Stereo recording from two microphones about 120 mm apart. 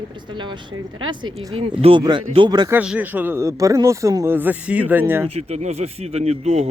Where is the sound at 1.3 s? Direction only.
55° right (ahead or behind).